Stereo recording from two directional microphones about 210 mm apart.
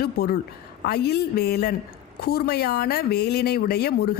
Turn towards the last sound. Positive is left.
turn(degrees=50)  # may be behind; listen again after turning